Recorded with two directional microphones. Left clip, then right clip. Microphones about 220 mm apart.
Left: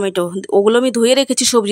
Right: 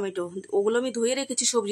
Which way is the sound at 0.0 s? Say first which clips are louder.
Left 12 dB; 45° left (ahead or behind).